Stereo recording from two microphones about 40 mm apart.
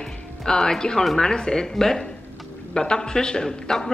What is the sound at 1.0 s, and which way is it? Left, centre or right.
Speech, centre.